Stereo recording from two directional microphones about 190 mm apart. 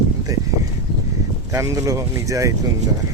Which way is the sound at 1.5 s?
15° right (ahead or behind).